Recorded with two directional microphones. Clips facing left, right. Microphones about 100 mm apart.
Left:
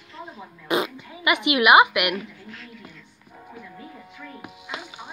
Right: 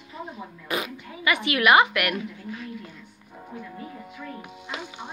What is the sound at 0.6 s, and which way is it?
Speech, 25° left (ahead or behind).